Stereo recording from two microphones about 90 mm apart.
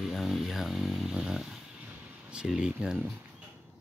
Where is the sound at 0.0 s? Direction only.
Centre (ahead or behind).